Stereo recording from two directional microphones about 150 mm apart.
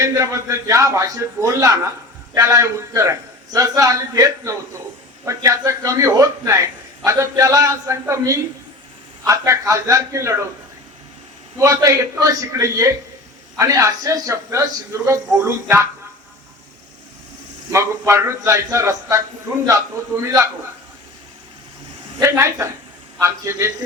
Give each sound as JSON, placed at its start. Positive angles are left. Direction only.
{"t": 0.0, "sound": "a man's voice", "side_deg": -20}
{"t": 11.6, "sound": "a man's voice", "side_deg": -25}
{"t": 17.7, "sound": "a man's voice", "side_deg": -20}
{"t": 22.2, "sound": "a man's voice", "side_deg": -20}